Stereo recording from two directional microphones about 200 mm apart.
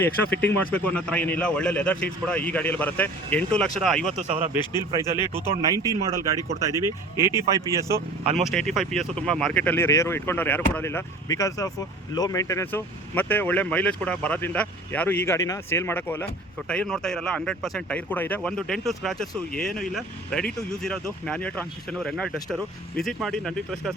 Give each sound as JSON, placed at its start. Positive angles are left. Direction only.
{"t": 0.0, "sound": "a man's voice", "side_deg": 10}
{"t": 4.3, "sound": "speech", "side_deg": -35}
{"t": 5.3, "sound": "speech", "side_deg": -15}
{"t": 8.2, "sound": "speech", "side_deg": -35}
{"t": 8.4, "sound": "a man's voice", "side_deg": 0}